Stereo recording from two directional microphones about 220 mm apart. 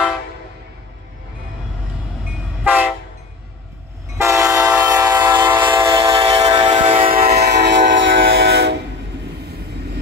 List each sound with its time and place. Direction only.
2.6 s train: 10° right (ahead or behind)
4.2 s train: 15° right (ahead or behind)
6.6 s train: 30° right (ahead or behind); by 8.7 s 50° right (ahead or behind)